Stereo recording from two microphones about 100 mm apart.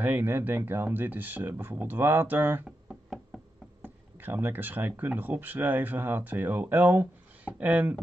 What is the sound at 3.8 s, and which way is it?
Speech, 20° right (ahead or behind).